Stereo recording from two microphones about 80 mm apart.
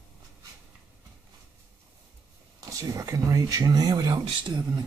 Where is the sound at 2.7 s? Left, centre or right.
Right.